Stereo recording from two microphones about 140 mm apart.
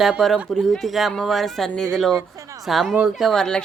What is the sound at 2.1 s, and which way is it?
Speech, 20° right (ahead or behind).